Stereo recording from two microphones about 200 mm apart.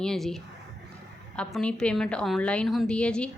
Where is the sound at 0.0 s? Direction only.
Centre (ahead or behind).